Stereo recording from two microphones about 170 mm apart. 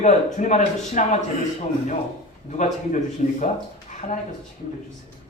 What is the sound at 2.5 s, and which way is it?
Speech, 45° left (ahead or behind).